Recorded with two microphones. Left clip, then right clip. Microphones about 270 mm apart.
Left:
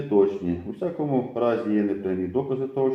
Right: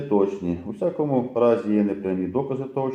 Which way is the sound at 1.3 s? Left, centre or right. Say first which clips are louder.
Right 5 dB; right.